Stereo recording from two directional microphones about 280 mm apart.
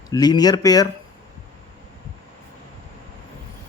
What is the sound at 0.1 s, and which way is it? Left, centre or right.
Speech, centre.